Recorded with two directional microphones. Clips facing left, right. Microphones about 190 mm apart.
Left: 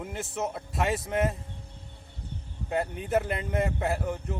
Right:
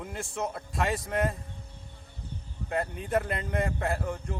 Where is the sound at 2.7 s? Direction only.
Centre (ahead or behind).